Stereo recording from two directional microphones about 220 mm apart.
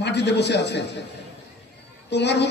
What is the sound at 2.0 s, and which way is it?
Speech, 50° left (ahead or behind).